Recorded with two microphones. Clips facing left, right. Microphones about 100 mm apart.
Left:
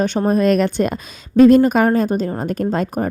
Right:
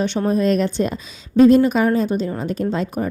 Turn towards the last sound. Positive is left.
turn(degrees=45)  # may be behind; listen again after turning